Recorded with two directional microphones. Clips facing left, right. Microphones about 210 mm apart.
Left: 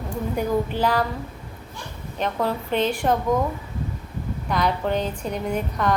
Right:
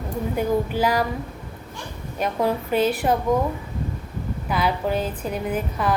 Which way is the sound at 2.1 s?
10° right (ahead or behind).